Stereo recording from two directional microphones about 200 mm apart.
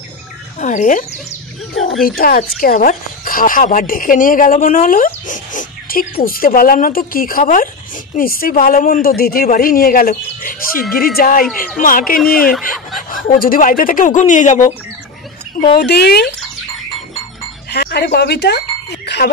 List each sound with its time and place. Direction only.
0.6 s speech: 40° left (ahead or behind)
2.0 s speech: 50° left (ahead or behind)
11.4 s speech: 5° left (ahead or behind)
11.8 s speech: 45° left (ahead or behind)
12.2 s fowl: 5° left (ahead or behind)
13.1 s speech: 45° left (ahead or behind)
15.6 s speech: 55° left (ahead or behind)
17.6 s a sound: 55° left (ahead or behind)